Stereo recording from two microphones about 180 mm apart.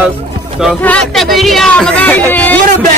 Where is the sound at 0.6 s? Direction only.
5° left (ahead or behind).